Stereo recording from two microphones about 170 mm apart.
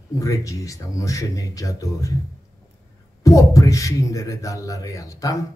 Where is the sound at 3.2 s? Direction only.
20° left (ahead or behind).